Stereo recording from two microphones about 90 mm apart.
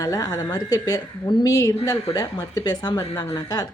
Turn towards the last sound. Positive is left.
turn(degrees=45)  # may be behind; listen again after turning